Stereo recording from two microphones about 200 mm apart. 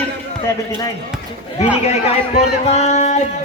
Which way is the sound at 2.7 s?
35° left (ahead or behind).